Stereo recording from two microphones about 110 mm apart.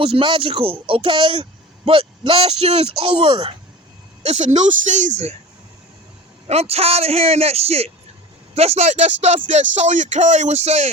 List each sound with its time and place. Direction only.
0.0 s speech: 50° right (ahead or behind)
4.3 s speech: 90° right
6.5 s a man's voice: 70° right (ahead or behind); by 10.8 s 90° right